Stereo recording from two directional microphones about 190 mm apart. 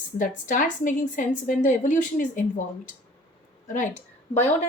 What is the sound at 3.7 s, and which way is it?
Speech, 40° left (ahead or behind).